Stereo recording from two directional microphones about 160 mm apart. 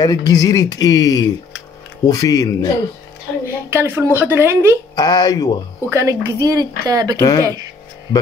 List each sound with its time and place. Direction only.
0.0 s speech: 25° left (ahead or behind)
3.4 s speech: 15° right (ahead or behind)
4.9 s speech: 25° left (ahead or behind)
5.9 s a woman's voice: 20° right (ahead or behind)
7.2 s speech: 20° left (ahead or behind)